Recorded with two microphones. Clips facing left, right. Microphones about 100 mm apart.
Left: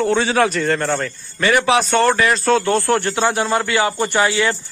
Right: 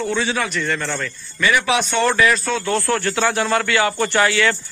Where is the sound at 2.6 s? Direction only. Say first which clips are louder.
Left 3 dB; 20° left (ahead or behind).